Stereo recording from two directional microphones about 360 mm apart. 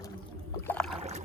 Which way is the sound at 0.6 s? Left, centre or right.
Centre.